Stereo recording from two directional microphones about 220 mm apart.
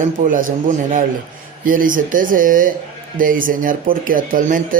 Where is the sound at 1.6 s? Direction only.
40° right (ahead or behind).